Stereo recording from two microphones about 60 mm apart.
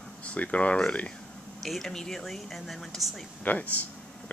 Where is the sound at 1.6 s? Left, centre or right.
Centre.